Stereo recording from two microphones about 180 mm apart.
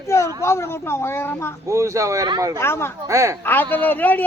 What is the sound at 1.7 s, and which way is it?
Speech, 15° right (ahead or behind).